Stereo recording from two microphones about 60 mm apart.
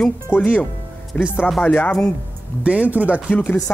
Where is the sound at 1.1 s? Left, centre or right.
Centre.